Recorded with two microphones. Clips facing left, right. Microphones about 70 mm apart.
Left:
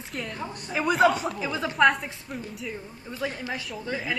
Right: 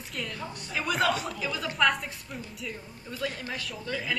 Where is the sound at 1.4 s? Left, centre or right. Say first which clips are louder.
Left 3 dB; left.